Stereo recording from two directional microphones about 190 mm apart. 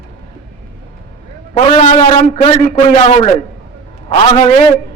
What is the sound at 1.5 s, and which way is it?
A man's voice, 30° left (ahead or behind).